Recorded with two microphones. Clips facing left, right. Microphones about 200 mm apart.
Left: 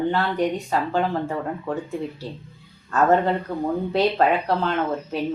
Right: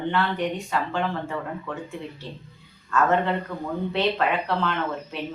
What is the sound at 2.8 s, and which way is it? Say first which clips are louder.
Speech: left 3 dB; 40° left (ahead or behind).